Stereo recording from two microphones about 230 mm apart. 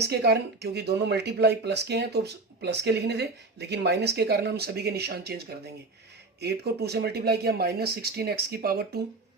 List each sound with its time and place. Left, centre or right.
0.0 s speech: right